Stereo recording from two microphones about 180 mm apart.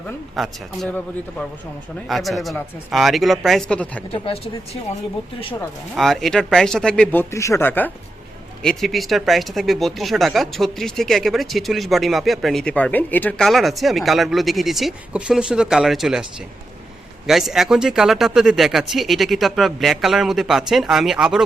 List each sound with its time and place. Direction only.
0.3 s speech: centre (ahead or behind)
4.1 s speech: 30° left (ahead or behind)
6.0 s speech: centre (ahead or behind)
17.2 s speech: centre (ahead or behind)